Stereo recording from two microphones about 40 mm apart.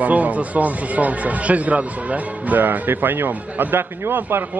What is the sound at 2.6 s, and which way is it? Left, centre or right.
A man's voice, right.